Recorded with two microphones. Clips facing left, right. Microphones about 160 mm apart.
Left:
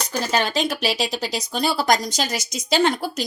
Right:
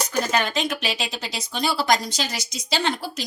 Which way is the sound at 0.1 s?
35° left (ahead or behind).